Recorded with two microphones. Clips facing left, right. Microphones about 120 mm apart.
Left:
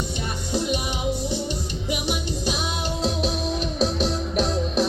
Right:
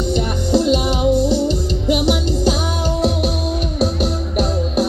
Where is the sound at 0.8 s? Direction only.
70° right (ahead or behind).